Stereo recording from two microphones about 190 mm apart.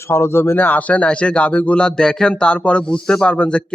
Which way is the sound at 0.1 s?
15° left (ahead or behind).